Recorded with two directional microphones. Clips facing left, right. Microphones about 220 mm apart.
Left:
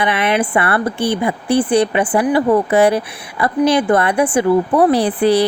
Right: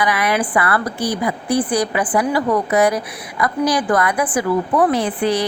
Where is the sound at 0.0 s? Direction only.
25° left (ahead or behind).